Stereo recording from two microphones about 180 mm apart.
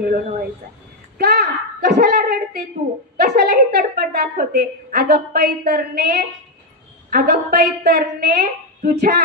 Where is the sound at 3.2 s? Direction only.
55° right (ahead or behind).